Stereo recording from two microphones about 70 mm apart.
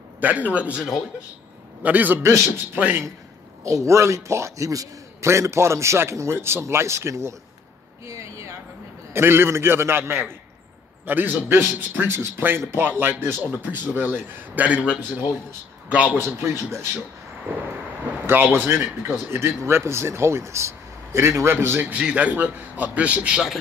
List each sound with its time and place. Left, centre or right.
0.2 s a man's voice: right
3.6 s a man's voice: right
8.1 s a sound: right
9.1 s a man's voice: right; by 16.2 s centre
16.2 s speech: right
18.2 s speech: right
21.8 s a man's voice: centre